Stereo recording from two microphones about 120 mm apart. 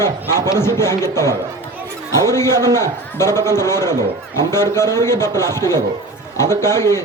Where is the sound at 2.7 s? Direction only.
20° left (ahead or behind).